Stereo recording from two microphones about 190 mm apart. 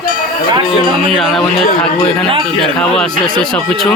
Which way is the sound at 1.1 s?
Centre (ahead or behind).